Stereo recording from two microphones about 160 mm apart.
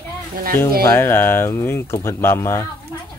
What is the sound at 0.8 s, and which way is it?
Speech, 20° left (ahead or behind).